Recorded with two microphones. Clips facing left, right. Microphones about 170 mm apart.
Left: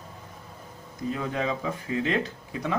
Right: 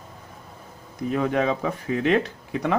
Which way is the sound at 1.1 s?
65° right (ahead or behind).